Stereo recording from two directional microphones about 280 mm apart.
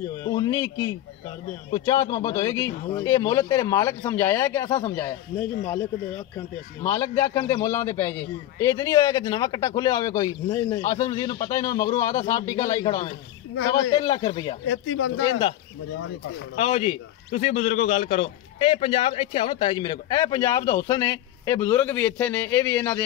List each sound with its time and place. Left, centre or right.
0.2 s a man's voice: centre
6.3 s a man's voice: centre
14.7 s speech: left
16.5 s a man's voice: left